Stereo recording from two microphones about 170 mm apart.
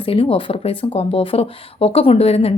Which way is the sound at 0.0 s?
35° left (ahead or behind).